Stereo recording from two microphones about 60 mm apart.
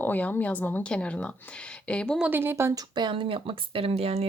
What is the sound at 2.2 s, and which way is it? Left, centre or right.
Speech, right.